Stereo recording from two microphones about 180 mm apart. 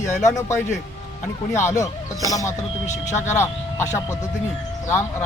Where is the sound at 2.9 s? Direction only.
40° left (ahead or behind).